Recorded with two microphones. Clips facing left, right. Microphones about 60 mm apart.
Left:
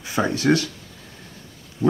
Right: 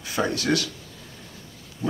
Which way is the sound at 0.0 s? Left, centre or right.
Left.